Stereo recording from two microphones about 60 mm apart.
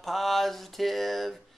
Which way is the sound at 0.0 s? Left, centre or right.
Centre.